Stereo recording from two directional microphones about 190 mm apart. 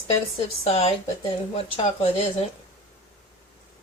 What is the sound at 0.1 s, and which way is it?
Speech, 30° left (ahead or behind).